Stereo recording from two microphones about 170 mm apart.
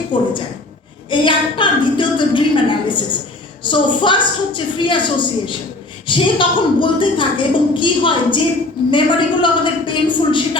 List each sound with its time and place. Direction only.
0.1 s a woman's voice: 30° left (ahead or behind)